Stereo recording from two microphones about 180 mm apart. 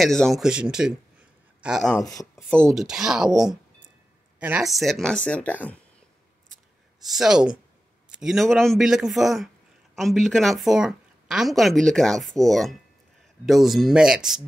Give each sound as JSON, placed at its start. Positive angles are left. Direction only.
{"t": 0.0, "sound": "a woman's voice", "side_deg": 0}
{"t": 2.0, "sound": "speech", "side_deg": 15}
{"t": 2.5, "sound": "a woman's voice", "side_deg": 0}
{"t": 7.1, "sound": "a woman's voice", "side_deg": -5}